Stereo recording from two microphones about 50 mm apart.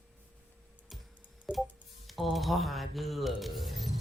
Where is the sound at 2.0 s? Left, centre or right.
Centre.